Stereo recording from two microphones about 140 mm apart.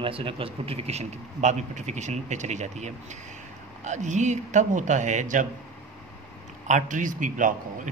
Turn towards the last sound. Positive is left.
turn(degrees=-65)  # may be behind; listen again after turning